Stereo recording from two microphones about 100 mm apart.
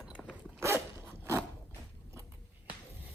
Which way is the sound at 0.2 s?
5° left (ahead or behind).